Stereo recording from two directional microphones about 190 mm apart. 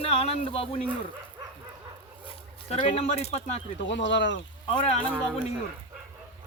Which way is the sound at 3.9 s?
70° left (ahead or behind).